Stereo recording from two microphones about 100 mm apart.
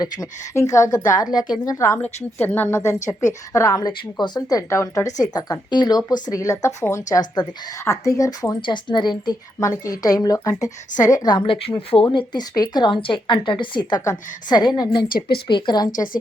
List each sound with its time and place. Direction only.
0.0 s a woman's voice: 35° left (ahead or behind)
2.4 s a woman's voice: 20° left (ahead or behind); by 6.0 s 45° left (ahead or behind)
6.1 s a woman's voice: 35° left (ahead or behind)
9.6 s a woman's voice: 35° left (ahead or behind); by 12.0 s 65° left (ahead or behind)
12.1 s a woman's voice: 45° left (ahead or behind)